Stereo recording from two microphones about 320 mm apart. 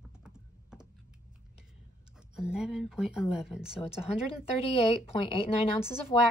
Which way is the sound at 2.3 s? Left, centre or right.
Centre.